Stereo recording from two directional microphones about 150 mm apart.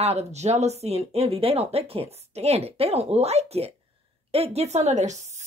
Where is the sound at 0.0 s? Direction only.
45° right (ahead or behind).